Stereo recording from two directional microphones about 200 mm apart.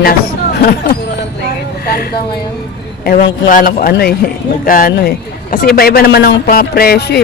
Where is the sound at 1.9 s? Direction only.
50° left (ahead or behind).